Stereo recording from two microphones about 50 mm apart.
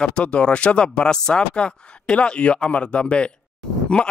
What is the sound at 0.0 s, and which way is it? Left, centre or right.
Speech, left.